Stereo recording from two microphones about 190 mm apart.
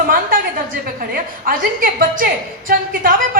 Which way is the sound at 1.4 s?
45° right (ahead or behind).